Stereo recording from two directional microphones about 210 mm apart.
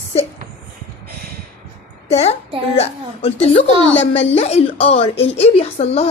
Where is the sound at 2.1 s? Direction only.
30° left (ahead or behind).